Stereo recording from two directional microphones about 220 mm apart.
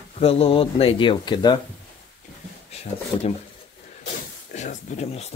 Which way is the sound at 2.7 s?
30° left (ahead or behind).